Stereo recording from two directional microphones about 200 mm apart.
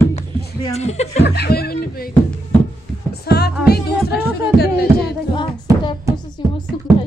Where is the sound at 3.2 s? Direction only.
55° left (ahead or behind).